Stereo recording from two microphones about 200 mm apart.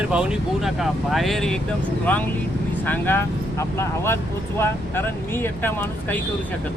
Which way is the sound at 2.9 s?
10° left (ahead or behind).